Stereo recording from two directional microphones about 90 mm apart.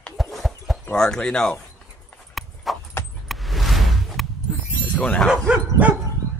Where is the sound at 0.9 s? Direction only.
10° left (ahead or behind).